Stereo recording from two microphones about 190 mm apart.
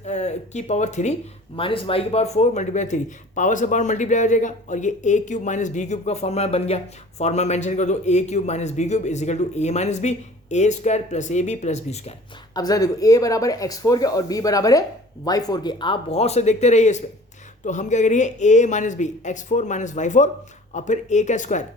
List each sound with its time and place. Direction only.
0.0 s speech: 35° left (ahead or behind)
1.5 s speech: 30° left (ahead or behind)
12.5 s speech: 20° left (ahead or behind); by 21.6 s 40° left (ahead or behind)